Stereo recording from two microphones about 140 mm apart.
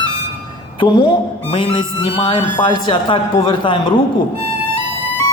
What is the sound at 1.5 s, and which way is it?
Speech, 35° left (ahead or behind).